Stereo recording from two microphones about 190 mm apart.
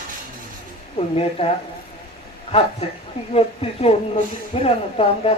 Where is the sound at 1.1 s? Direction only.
30° left (ahead or behind).